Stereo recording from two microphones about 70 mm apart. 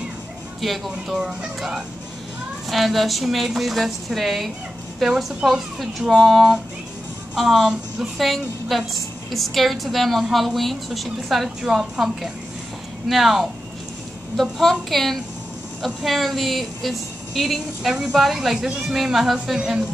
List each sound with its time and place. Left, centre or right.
0.6 s a woman's voice: centre